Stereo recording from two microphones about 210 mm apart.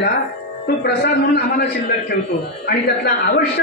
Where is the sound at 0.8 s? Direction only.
45° left (ahead or behind).